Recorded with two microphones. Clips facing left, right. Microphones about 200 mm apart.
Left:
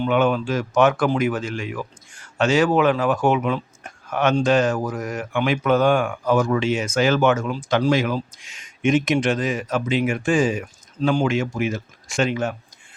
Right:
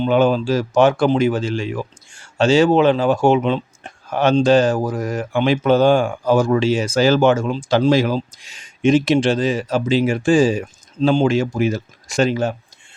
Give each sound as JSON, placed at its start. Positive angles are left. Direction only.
{"t": 0.0, "sound": "speech", "side_deg": -30}